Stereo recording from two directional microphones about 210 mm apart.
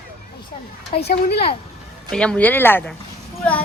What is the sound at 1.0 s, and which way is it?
Speech, 50° left (ahead or behind).